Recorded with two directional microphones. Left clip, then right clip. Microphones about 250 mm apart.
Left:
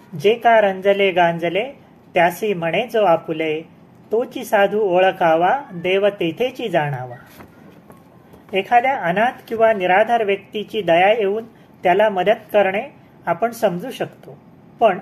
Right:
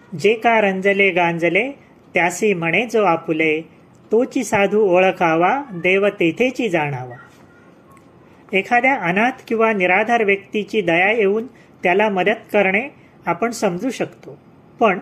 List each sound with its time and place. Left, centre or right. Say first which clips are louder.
0.2 s a woman's voice: left 1 dB; right
8.5 s a woman's voice: even; right